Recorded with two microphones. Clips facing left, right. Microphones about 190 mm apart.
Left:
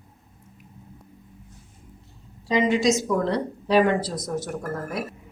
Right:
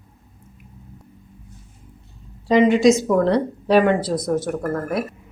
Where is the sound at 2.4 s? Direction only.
60° right (ahead or behind).